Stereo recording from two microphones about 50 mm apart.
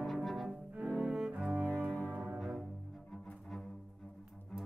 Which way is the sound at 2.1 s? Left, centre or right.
Right.